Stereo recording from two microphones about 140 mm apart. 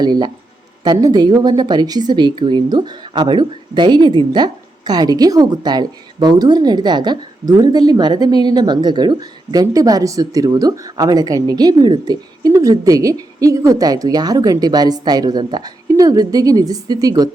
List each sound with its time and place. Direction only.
0.0 s speech: 30° right (ahead or behind)